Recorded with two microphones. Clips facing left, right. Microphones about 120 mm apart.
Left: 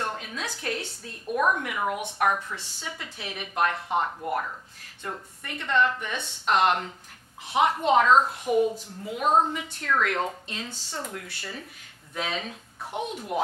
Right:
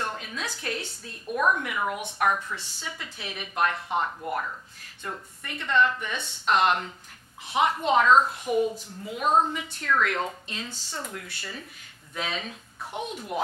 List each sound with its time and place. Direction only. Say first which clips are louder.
0.0 s a sound: left 1 dB; 40° left (ahead or behind)
0.6 s a woman's voice: left 1 dB; 50° left (ahead or behind)
1.3 s a woman's voice: even; 30° left (ahead or behind)
9.2 s a woman's voice: left 1 dB; 25° left (ahead or behind)
9.5 s a woman's voice: even; 45° left (ahead or behind)
10.7 s a woman's voice: left 1 dB; 30° left (ahead or behind); by 12.5 s 45° left (ahead or behind)
12.9 s speech: left 2 dB; 10° left (ahead or behind)